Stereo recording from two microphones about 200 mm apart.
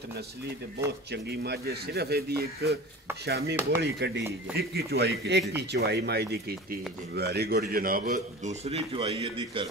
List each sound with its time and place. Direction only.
0.8 s a man's voice: 55° right (ahead or behind); by 9.7 s 25° right (ahead or behind)